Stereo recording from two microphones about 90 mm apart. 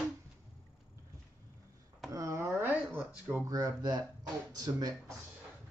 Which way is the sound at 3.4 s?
40° right (ahead or behind).